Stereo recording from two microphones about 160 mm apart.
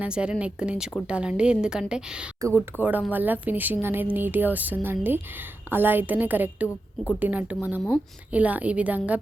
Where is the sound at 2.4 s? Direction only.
20° right (ahead or behind).